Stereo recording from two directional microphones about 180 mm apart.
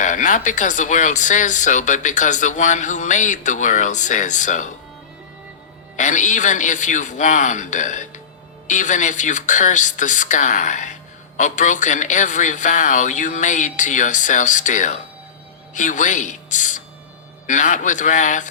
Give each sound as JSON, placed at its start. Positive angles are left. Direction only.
{"t": 0.0, "sound": "speech", "side_deg": 45}
{"t": 6.0, "sound": "speech", "side_deg": 45}